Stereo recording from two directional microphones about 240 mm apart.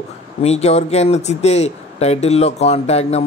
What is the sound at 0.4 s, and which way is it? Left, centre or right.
Speech, left.